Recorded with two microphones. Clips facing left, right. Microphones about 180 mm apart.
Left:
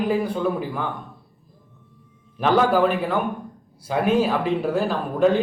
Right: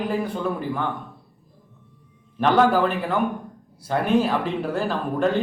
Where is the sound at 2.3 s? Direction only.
5° left (ahead or behind).